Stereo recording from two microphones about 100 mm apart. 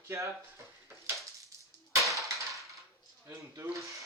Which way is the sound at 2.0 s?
Centre (ahead or behind).